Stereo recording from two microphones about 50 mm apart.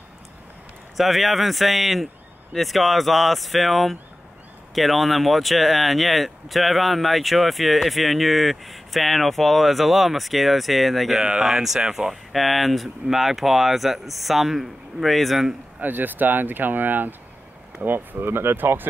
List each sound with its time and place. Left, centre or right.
0.9 s speech: centre
11.1 s speech: centre
15.8 s speech: right